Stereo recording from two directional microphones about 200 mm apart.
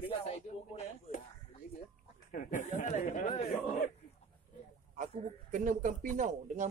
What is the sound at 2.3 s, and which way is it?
Speech, 40° left (ahead or behind).